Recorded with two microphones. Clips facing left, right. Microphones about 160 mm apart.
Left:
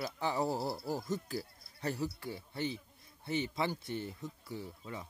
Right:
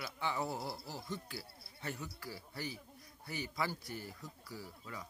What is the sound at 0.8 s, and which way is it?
Speech, 45° left (ahead or behind).